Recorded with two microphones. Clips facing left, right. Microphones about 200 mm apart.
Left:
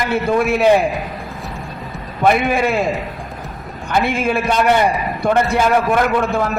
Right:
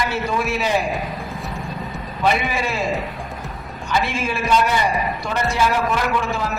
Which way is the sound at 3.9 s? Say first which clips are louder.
Left 5 dB; 55° left (ahead or behind).